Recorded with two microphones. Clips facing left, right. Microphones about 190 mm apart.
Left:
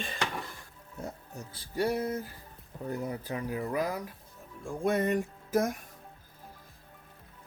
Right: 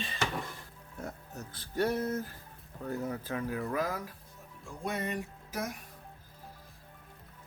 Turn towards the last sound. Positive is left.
turn(degrees=50)  # may be behind; listen again after turning